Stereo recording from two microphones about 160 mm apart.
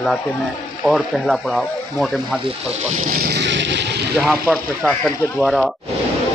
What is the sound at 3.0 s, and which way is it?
Vehicle, 65° right (ahead or behind).